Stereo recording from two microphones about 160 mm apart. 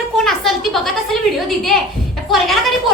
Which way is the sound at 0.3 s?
Centre (ahead or behind).